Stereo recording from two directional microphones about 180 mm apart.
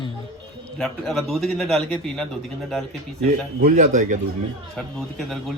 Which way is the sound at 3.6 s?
50° right (ahead or behind).